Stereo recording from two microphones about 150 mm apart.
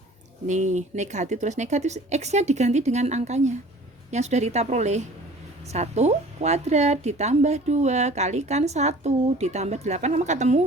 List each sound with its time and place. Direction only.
0.4 s a woman's voice: 50° right (ahead or behind)